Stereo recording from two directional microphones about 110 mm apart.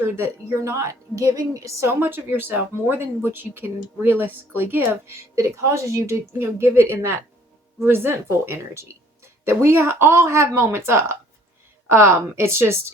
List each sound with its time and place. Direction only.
0.0 s speech: 25° right (ahead or behind)